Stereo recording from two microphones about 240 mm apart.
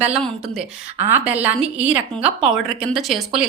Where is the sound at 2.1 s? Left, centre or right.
Right.